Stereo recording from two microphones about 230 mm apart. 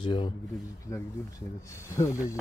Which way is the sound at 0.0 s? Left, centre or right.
Left.